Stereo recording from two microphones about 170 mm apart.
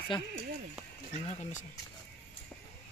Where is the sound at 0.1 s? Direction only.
30° left (ahead or behind).